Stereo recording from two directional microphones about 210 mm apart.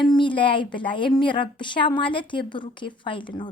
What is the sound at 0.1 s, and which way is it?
Speech, 25° left (ahead or behind).